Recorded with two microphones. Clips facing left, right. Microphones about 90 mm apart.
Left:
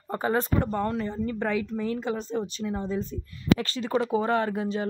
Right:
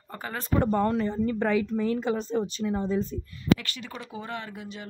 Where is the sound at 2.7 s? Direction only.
15° right (ahead or behind).